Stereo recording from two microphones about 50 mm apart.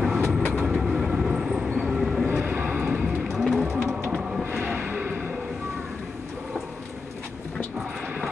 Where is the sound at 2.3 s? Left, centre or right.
Right.